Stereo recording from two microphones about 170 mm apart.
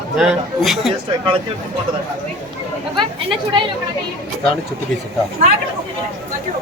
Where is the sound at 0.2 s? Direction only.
Centre (ahead or behind).